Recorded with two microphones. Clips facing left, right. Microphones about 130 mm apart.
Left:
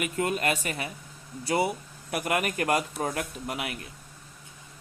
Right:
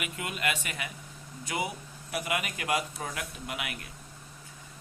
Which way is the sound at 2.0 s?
50° left (ahead or behind).